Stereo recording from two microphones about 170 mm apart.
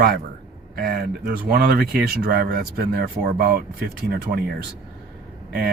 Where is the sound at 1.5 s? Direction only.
60° right (ahead or behind).